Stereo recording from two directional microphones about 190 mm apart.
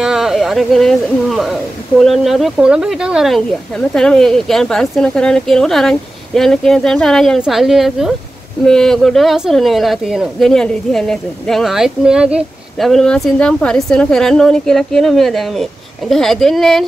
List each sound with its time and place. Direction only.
0.0 s speech: 5° right (ahead or behind)